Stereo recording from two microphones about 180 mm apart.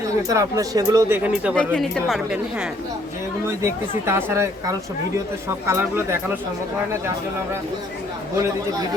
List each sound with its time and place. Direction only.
0.3 s speech: 20° right (ahead or behind)
1.5 s a woman's voice: 5° left (ahead or behind)
3.6 s speech: 15° right (ahead or behind)